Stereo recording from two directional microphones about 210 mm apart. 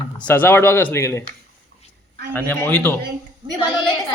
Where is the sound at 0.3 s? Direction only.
10° left (ahead or behind).